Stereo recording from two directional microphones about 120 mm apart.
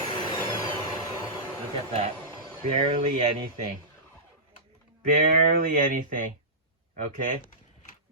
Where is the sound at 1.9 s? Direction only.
60° right (ahead or behind).